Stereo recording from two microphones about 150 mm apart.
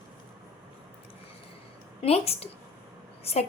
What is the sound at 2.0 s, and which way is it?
A woman's voice, 40° left (ahead or behind).